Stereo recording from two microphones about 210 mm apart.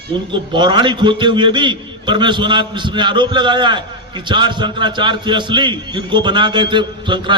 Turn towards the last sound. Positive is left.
turn(degrees=-20)  # may be behind; listen again after turning